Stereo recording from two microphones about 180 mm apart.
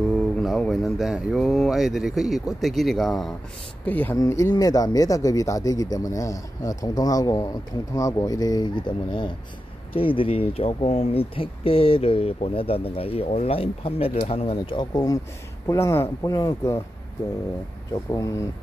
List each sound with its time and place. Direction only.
0.4 s speech: centre (ahead or behind); by 16.8 s 20° left (ahead or behind)
18.1 s speech: 15° left (ahead or behind)